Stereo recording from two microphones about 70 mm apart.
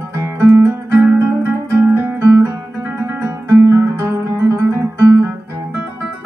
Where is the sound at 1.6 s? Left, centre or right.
Right.